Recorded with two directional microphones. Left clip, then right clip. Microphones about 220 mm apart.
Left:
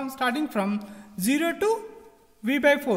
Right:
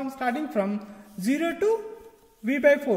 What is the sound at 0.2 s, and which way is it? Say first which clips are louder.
A woman's voice: left 1 dB; 35° left (ahead or behind).